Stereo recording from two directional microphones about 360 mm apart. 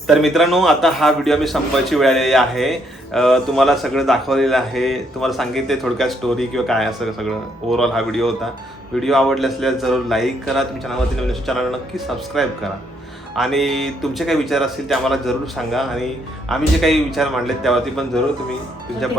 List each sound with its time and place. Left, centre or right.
0.1 s a man's voice: centre